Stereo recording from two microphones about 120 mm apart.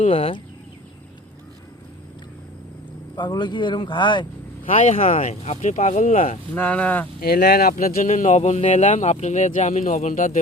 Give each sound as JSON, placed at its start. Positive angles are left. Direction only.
{"t": 0.0, "sound": "speech", "side_deg": 55}
{"t": 3.2, "sound": "speech", "side_deg": 40}
{"t": 4.6, "sound": "speech", "side_deg": 85}
{"t": 6.5, "sound": "speech", "side_deg": 10}
{"t": 7.7, "sound": "speech", "side_deg": 90}